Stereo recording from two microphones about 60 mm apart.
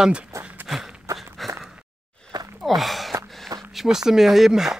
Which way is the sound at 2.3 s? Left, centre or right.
Right.